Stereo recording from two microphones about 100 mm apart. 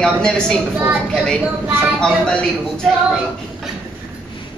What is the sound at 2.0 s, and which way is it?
Speech, 10° left (ahead or behind).